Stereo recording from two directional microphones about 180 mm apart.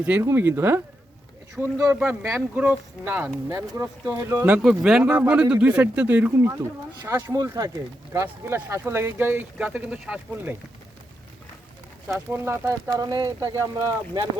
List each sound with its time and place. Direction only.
0.0 s speech: 10° right (ahead or behind)
12.0 s speech: 15° right (ahead or behind)